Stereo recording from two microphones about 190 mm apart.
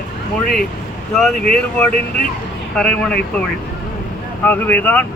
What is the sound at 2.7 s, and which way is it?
Speech, 5° left (ahead or behind).